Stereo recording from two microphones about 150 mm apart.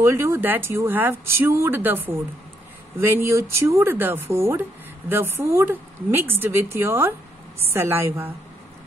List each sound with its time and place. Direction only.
0.0 s speech: 20° right (ahead or behind)